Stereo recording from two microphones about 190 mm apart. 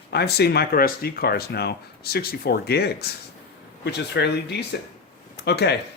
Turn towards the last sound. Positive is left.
turn(degrees=60)  # may be behind; listen again after turning